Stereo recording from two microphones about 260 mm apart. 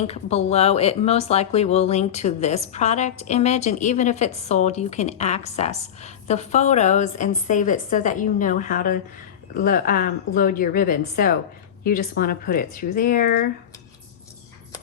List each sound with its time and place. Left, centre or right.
0.1 s a woman's voice: left